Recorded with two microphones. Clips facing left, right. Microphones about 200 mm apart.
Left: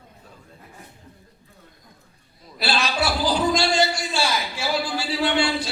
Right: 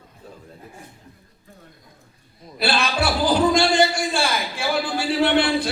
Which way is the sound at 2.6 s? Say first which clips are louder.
Right 2 dB; 55° right (ahead or behind).